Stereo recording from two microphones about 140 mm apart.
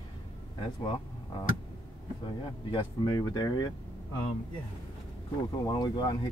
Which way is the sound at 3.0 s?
30° left (ahead or behind).